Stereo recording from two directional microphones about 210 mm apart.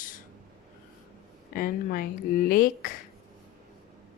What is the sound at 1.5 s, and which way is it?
Speech, 40° left (ahead or behind).